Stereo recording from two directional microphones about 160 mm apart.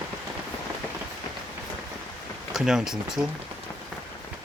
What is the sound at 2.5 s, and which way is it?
Speech, 5° right (ahead or behind).